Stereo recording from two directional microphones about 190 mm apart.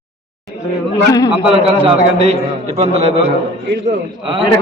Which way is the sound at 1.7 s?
30° right (ahead or behind).